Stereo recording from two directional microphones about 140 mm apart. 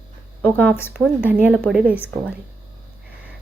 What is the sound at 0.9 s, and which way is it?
Speech, 5° right (ahead or behind).